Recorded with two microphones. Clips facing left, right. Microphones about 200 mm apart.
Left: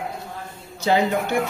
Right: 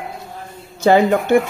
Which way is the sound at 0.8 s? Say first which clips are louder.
Right 7 dB; 55° right (ahead or behind).